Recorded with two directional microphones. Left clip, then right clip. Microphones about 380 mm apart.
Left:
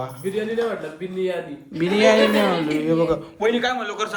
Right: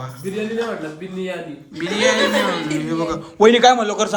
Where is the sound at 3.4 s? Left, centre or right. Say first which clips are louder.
Right 12 dB; centre.